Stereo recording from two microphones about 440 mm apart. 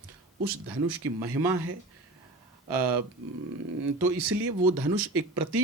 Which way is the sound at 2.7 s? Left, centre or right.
Right.